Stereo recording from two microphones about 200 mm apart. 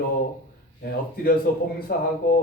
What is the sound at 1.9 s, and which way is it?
Speech, 50° left (ahead or behind).